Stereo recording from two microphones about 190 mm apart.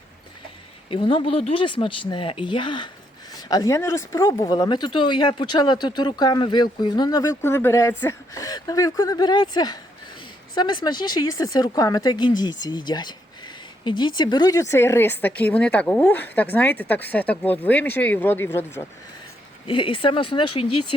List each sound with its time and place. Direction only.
0.9 s a woman's voice: 25° left (ahead or behind)
19.6 s speech: 25° left (ahead or behind)